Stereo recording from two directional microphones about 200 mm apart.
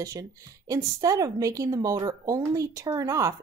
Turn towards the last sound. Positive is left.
turn(degrees=-15)  # may be behind; listen again after turning